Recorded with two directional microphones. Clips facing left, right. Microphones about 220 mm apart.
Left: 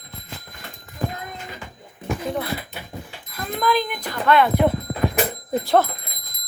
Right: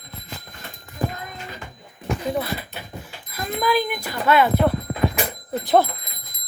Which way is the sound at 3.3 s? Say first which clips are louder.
Even; 5° right (ahead or behind).